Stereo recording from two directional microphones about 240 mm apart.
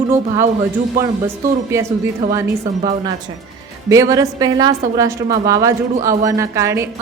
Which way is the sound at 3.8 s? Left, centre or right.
Centre.